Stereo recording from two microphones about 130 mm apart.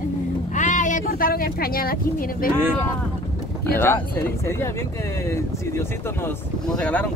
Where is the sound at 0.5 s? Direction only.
75° left (ahead or behind).